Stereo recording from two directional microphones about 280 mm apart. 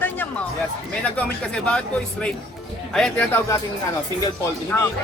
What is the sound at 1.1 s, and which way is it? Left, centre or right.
Speech, centre.